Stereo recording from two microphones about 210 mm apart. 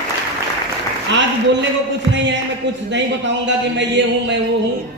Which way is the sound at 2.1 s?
60° right (ahead or behind).